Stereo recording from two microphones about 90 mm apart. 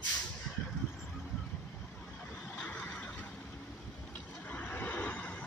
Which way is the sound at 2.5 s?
15° left (ahead or behind).